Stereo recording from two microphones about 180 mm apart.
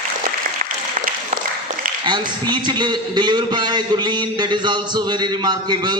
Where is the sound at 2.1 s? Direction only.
25° right (ahead or behind).